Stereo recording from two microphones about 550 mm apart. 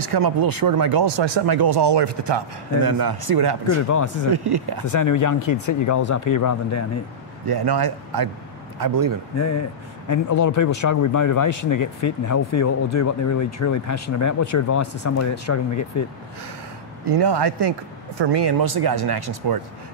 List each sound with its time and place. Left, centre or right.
0.0 s speech: right
4.8 s speech: left
7.4 s speech: right
9.3 s speech: left
17.0 s speech: right